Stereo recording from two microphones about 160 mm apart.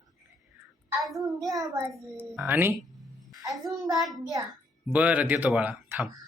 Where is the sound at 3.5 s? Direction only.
Centre (ahead or behind).